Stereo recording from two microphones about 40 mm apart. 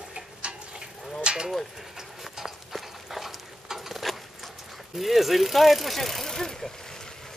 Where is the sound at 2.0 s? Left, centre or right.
Centre.